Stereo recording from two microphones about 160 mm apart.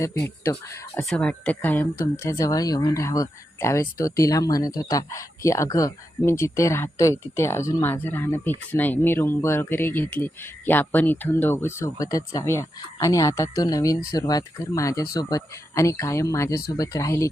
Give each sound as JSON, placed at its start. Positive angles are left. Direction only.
{"t": 0.0, "sound": "speech", "side_deg": 15}
{"t": 1.0, "sound": "speech", "side_deg": 5}